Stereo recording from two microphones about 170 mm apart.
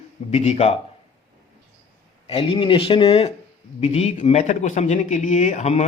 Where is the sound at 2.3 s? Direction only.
30° left (ahead or behind).